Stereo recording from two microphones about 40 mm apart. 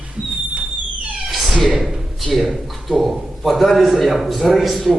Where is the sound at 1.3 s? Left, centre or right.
Centre.